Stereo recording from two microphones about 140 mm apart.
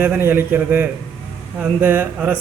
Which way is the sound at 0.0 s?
15° right (ahead or behind).